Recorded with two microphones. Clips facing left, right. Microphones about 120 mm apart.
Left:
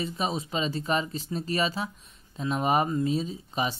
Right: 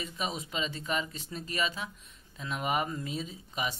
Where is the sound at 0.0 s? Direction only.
30° left (ahead or behind).